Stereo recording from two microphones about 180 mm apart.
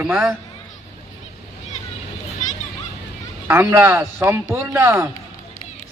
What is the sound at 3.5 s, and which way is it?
A man's voice, 15° right (ahead or behind).